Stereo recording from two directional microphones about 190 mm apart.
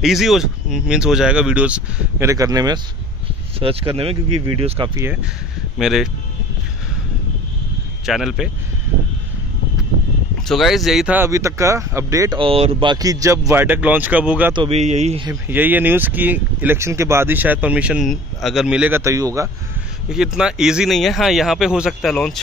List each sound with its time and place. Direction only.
0.0 s speech: centre (ahead or behind); by 4.9 s 30° right (ahead or behind)
4.9 s speech: 10° right (ahead or behind)
5.8 s speech: centre (ahead or behind)
8.0 s speech: centre (ahead or behind)
10.5 s speech: centre (ahead or behind); by 12.4 s 15° right (ahead or behind)
12.4 s speech: 30° right (ahead or behind); by 14.5 s 5° right (ahead or behind)
14.5 s speech: 30° right (ahead or behind)
15.4 s speech: 10° right (ahead or behind)
20.1 s speech: 5° right (ahead or behind)